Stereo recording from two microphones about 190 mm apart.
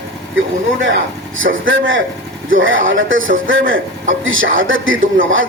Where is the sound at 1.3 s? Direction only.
90° right.